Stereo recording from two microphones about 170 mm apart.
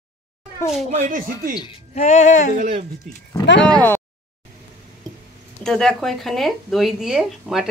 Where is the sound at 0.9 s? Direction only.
50° right (ahead or behind).